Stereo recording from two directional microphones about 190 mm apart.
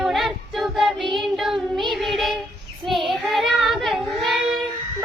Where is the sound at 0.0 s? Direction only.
Centre (ahead or behind).